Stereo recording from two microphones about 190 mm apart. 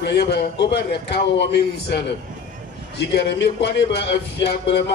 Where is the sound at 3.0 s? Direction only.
65° left (ahead or behind).